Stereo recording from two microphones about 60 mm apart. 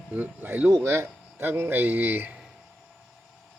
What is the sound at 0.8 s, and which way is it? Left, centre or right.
Speech, right.